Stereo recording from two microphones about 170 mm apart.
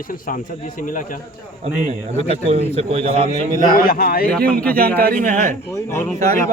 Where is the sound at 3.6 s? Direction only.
60° left (ahead or behind).